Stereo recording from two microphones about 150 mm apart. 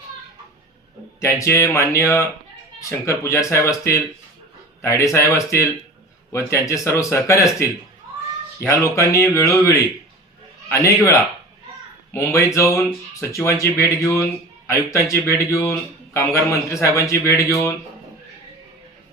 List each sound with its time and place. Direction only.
1.2 s a man's voice: 20° left (ahead or behind)